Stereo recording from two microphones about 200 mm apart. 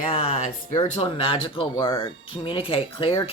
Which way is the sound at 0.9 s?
25° left (ahead or behind).